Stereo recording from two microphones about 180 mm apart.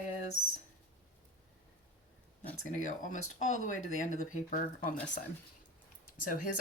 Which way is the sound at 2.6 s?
45° left (ahead or behind).